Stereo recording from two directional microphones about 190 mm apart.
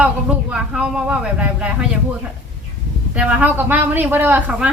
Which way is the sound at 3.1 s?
5° right (ahead or behind).